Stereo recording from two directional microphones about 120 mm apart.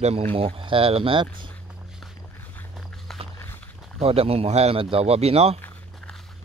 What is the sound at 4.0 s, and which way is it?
Speech, 55° right (ahead or behind).